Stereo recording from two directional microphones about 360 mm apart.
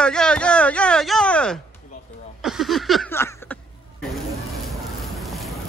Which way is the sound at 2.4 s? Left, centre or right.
Centre.